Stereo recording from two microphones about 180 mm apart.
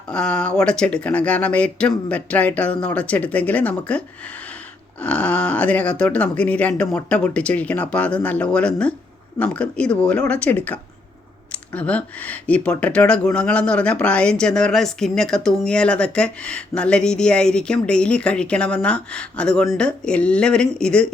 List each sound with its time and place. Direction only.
0.1 s speech: 5° left (ahead or behind)